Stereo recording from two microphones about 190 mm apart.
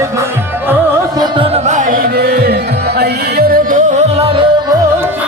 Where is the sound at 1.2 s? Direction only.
30° right (ahead or behind); by 3.8 s 55° right (ahead or behind).